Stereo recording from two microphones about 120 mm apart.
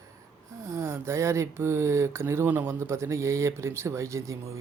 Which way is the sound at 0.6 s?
25° right (ahead or behind).